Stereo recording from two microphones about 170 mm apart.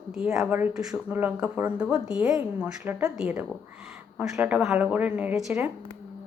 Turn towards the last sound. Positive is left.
turn(degrees=-5)  # may be behind; listen again after turning